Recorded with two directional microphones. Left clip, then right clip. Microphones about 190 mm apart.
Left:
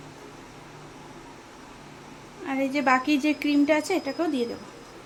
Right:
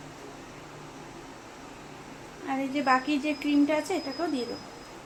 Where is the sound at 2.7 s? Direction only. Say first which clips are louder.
Left 3 dB; 55° left (ahead or behind).